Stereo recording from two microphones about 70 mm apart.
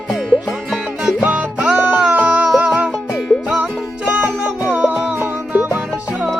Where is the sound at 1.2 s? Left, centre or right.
Right.